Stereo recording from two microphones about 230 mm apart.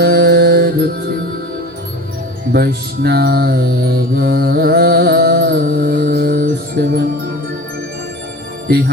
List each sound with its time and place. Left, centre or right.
0.0 s music: right
2.5 s speech: right
4.2 s music: right